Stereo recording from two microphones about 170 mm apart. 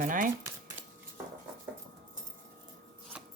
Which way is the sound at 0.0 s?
50° right (ahead or behind).